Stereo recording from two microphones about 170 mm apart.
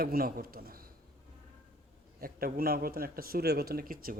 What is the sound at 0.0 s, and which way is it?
Speech, 60° right (ahead or behind).